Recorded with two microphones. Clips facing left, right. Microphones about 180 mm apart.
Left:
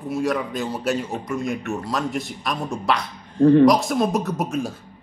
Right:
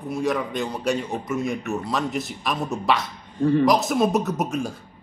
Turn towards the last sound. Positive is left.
turn(degrees=0)  # may be behind; listen again after turning